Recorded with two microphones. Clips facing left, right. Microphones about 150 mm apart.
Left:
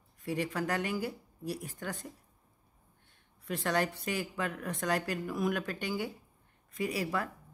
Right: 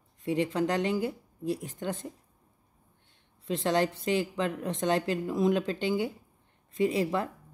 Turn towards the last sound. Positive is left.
turn(degrees=-25)  # may be behind; listen again after turning